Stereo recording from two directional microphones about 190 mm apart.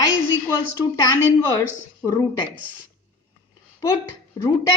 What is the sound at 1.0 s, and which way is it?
A woman's voice, 15° left (ahead or behind).